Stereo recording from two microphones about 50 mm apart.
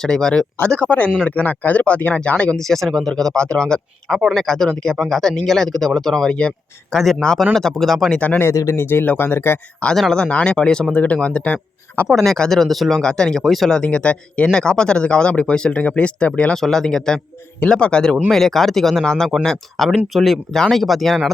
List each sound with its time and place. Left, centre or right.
0.0 s speech: centre
0.8 s speech: left
2.6 s speech: centre
3.3 s speech: centre
8.7 s speech: left
9.9 s speech: centre
10.2 s speech: left
12.0 s speech: centre
13.0 s speech: centre
13.4 s speech: centre
13.7 s speech: centre
14.5 s speech: centre
16.6 s speech: centre
18.3 s speech: centre